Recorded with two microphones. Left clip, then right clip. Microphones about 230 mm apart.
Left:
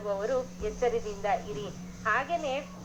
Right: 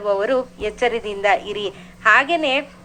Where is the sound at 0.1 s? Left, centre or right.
Right.